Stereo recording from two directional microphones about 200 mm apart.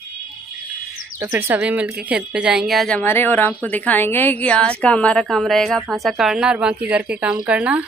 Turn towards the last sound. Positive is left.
turn(degrees=-5)  # may be behind; listen again after turning